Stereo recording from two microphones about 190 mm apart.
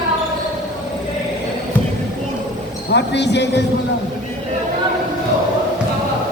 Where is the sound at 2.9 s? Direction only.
65° left (ahead or behind).